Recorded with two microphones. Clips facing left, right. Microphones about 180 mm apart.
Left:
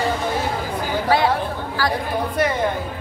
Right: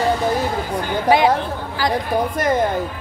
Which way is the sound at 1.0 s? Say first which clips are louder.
Right 4 dB; 15° right (ahead or behind).